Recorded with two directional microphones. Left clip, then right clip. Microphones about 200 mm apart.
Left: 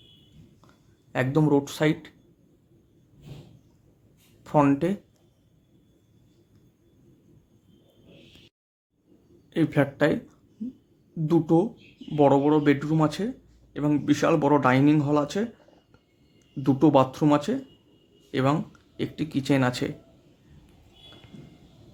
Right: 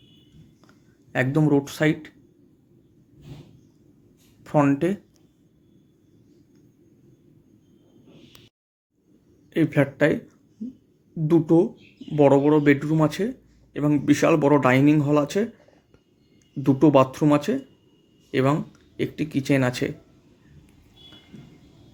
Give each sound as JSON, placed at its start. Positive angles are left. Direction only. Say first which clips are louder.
{"t": 1.1, "sound": "speech", "louder": "right 2 dB", "side_deg": 0}
{"t": 4.4, "sound": "speech", "louder": "right 1 dB", "side_deg": 0}
{"t": 9.5, "sound": "speech", "louder": "right 2 dB", "side_deg": 0}
{"t": 16.6, "sound": "speech", "louder": "right 3 dB", "side_deg": -5}